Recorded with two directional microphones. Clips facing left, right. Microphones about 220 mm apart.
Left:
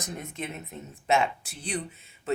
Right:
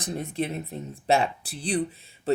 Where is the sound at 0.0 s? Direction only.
35° right (ahead or behind).